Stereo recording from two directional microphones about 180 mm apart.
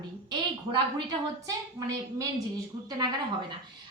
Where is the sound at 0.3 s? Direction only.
25° right (ahead or behind).